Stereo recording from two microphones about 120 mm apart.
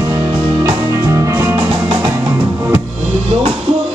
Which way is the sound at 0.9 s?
25° right (ahead or behind).